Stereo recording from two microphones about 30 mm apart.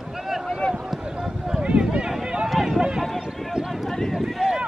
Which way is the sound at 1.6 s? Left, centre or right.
Right.